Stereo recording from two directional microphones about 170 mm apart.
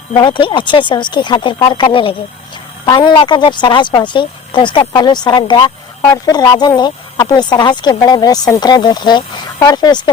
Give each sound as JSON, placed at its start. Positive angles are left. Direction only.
{"t": 0.2, "sound": "speech", "side_deg": 30}